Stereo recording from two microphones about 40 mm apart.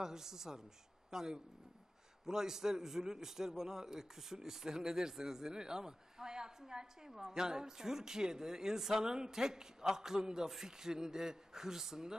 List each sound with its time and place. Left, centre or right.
0.0 s a man's voice: centre